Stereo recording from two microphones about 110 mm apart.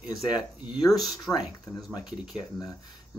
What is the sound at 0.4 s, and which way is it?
Speech, 10° right (ahead or behind).